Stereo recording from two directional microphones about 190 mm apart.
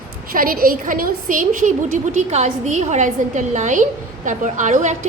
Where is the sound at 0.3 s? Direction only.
50° right (ahead or behind).